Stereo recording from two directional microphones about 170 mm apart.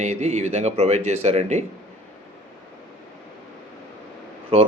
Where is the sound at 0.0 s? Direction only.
45° right (ahead or behind).